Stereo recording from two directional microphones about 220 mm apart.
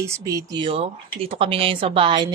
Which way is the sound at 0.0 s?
15° right (ahead or behind).